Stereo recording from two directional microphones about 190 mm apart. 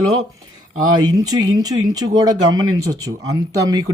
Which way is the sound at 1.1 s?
20° right (ahead or behind).